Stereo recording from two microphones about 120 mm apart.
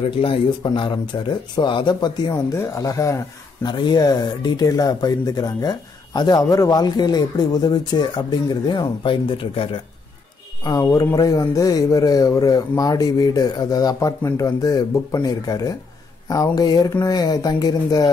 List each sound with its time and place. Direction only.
0.0 s a man's voice: 50° left (ahead or behind)
2.5 s speech: 25° left (ahead or behind)
3.6 s speech: 40° left (ahead or behind)
10.6 s speech: 30° left (ahead or behind)